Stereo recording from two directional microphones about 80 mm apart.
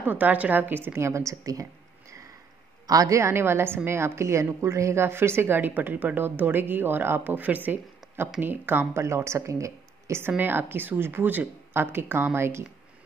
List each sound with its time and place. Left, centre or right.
0.0 s a woman's voice: right
10.3 s a woman's voice: right